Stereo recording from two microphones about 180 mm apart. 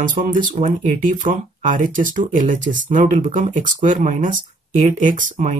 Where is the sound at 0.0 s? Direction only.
45° right (ahead or behind).